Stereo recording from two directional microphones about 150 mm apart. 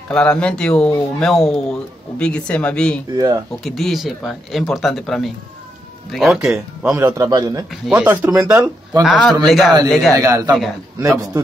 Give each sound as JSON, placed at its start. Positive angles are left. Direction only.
{"t": 0.1, "sound": "speech", "side_deg": 5}
{"t": 7.9, "sound": "speech", "side_deg": -15}
{"t": 9.0, "sound": "speech", "side_deg": 0}
{"t": 10.1, "sound": "speech", "side_deg": -20}